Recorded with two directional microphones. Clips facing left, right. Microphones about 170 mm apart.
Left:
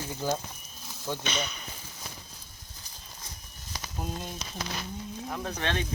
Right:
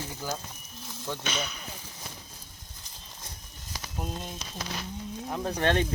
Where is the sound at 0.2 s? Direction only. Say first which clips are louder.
Left 5 dB; 20° left (ahead or behind).